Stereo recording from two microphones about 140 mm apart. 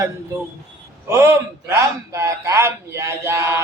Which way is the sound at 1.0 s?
20° right (ahead or behind).